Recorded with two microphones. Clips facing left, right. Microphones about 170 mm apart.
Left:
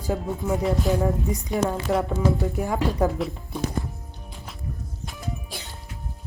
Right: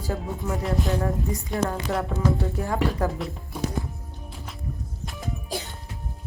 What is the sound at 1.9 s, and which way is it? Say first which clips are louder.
Speech: left 4 dB; centre (ahead or behind).